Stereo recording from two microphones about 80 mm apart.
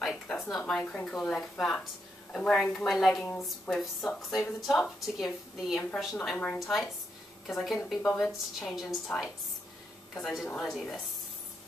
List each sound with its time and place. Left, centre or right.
0.0 s a woman's voice: centre
6.3 s speech: centre
6.6 s a woman's voice: centre
9.1 s speech: centre
10.1 s a woman's voice: centre